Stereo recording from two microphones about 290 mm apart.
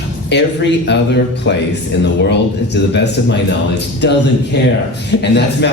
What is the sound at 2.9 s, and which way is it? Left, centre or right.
Speech, left.